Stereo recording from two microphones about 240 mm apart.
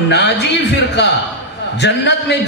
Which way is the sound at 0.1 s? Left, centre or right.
Left.